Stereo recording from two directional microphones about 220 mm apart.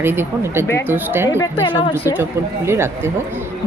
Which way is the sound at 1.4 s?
20° left (ahead or behind).